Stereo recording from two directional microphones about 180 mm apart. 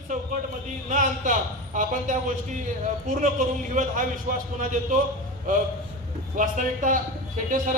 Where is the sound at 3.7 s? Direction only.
45° right (ahead or behind).